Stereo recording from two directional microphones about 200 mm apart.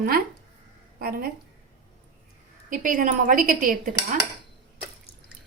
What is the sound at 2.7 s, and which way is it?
A woman's voice, 40° right (ahead or behind).